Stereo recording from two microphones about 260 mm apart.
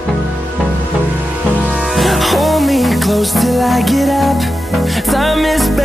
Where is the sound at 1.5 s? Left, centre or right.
Centre.